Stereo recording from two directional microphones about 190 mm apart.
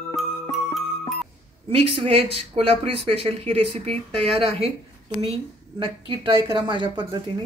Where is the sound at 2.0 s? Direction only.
30° right (ahead or behind).